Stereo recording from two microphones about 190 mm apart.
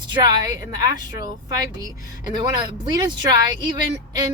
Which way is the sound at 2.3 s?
25° right (ahead or behind).